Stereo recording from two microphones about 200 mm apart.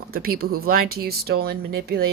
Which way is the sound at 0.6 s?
50° right (ahead or behind).